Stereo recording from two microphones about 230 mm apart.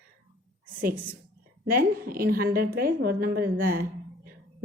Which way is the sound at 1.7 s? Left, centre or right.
Right.